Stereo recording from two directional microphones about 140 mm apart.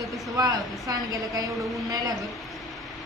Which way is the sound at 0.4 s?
25° right (ahead or behind).